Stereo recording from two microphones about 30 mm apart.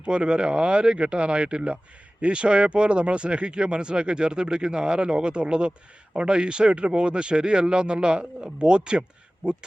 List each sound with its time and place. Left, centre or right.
0.0 s speech: right